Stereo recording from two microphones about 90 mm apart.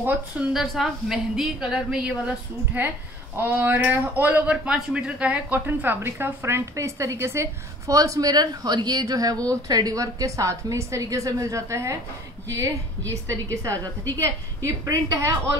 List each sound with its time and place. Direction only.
0.0 s speech: 20° right (ahead or behind)
0.5 s a woman's voice: 5° right (ahead or behind)
3.3 s speech: 20° right (ahead or behind)